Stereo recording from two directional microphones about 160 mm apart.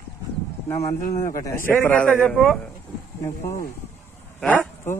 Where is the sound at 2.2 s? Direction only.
Centre (ahead or behind).